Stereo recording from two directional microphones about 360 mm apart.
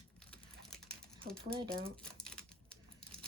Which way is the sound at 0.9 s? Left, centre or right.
Centre.